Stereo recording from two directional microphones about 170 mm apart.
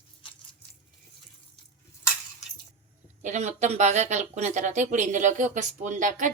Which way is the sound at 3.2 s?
45° right (ahead or behind).